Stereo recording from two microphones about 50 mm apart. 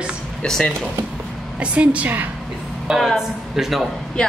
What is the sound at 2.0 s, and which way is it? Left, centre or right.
Speech, right.